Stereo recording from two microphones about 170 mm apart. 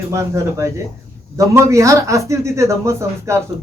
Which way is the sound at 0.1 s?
15° right (ahead or behind).